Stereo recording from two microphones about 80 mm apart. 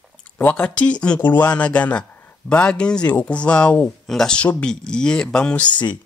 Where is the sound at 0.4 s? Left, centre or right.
Centre.